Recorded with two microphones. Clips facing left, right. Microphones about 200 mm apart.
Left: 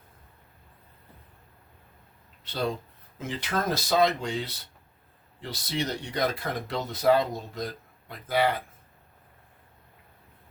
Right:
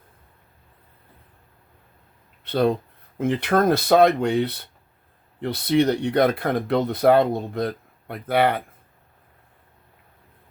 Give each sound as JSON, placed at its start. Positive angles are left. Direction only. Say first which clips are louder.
{"t": 2.4, "sound": "speech", "louder": "right 10 dB", "side_deg": -60}